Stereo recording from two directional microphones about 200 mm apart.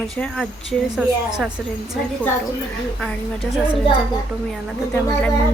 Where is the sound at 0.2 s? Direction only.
Centre (ahead or behind).